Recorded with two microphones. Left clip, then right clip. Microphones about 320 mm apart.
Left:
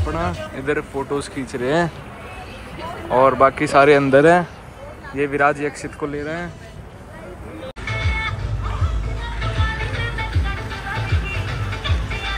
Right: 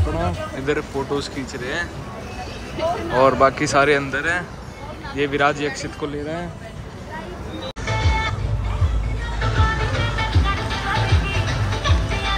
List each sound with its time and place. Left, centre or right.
0.0 s speech: centre
3.2 s speech: centre
7.8 s music: right
9.4 s music: right